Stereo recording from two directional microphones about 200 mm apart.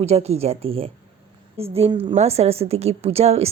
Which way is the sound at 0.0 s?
30° right (ahead or behind).